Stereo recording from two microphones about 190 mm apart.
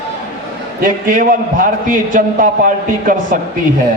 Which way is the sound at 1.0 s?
45° right (ahead or behind).